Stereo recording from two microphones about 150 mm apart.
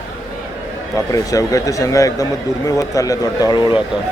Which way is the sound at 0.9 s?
20° left (ahead or behind).